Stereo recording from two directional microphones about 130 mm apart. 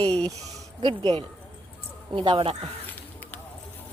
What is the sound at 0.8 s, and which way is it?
Speech, 35° right (ahead or behind).